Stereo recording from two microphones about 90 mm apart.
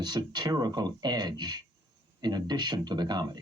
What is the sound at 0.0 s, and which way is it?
Speech, 50° right (ahead or behind).